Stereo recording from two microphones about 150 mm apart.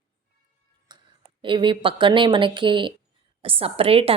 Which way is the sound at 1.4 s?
35° right (ahead or behind).